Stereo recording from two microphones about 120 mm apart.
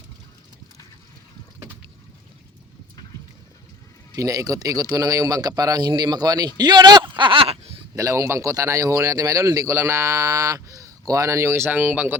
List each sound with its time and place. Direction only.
4.1 s a man's voice: 30° right (ahead or behind)
6.6 s a sound: 35° right (ahead or behind); by 7.8 s 55° right (ahead or behind)
7.9 s a man's voice: 25° right (ahead or behind)